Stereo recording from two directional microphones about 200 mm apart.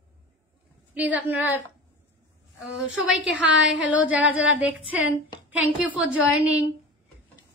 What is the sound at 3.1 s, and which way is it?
A woman's voice, 5° right (ahead or behind).